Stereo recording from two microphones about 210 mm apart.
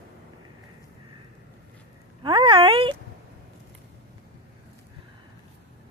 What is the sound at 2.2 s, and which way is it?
Speech, 20° right (ahead or behind).